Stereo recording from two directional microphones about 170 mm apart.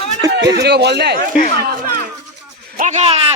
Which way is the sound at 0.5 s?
75° right (ahead or behind).